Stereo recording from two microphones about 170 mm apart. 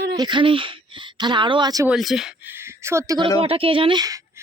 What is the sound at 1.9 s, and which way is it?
Speech, centre (ahead or behind).